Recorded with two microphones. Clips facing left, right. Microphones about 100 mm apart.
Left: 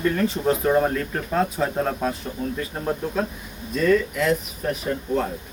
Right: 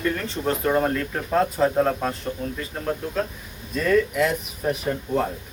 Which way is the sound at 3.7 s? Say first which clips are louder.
Even; centre (ahead or behind).